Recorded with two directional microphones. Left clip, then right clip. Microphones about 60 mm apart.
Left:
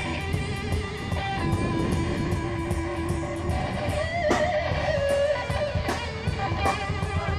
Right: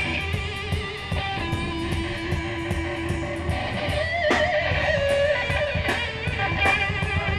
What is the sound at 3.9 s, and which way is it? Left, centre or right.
Music, right.